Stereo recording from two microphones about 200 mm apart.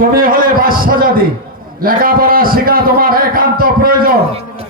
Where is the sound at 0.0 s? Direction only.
45° right (ahead or behind).